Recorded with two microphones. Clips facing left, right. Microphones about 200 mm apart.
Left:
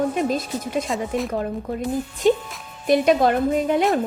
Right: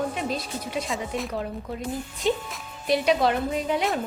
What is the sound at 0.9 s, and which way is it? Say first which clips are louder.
Speech: left 5 dB; centre (ahead or behind).